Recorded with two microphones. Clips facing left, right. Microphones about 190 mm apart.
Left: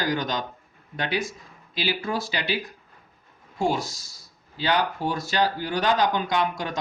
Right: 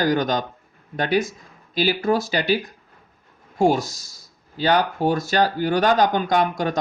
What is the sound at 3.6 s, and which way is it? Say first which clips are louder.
Speech: right 7 dB; 45° right (ahead or behind).